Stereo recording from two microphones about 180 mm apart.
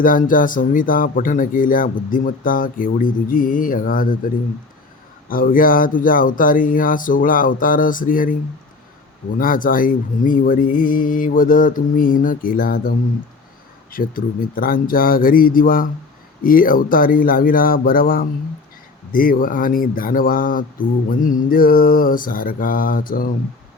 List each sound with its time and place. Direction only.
0.0 s speech: 50° left (ahead or behind)
5.3 s speech: 50° left (ahead or behind)
9.4 s speech: 50° left (ahead or behind)
13.9 s speech: 55° left (ahead or behind)